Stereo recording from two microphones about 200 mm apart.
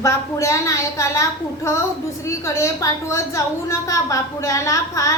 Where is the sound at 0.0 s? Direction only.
15° left (ahead or behind).